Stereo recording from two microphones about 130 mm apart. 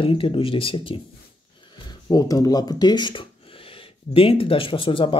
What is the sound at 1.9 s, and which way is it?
A man's voice, 30° left (ahead or behind).